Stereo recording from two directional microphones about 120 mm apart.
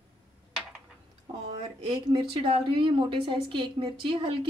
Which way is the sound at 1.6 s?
45° right (ahead or behind).